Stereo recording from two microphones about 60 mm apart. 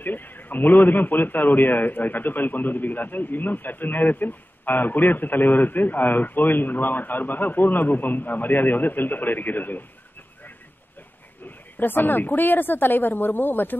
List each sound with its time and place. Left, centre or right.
0.0 s speech: left
11.4 s speech: left